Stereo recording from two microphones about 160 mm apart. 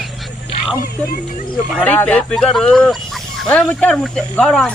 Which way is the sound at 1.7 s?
10° left (ahead or behind).